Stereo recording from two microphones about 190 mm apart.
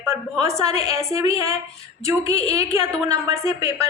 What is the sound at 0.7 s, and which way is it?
Speech, 35° left (ahead or behind).